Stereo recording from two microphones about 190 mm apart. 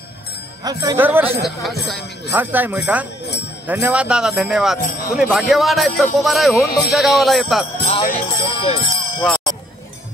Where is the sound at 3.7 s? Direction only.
10° right (ahead or behind).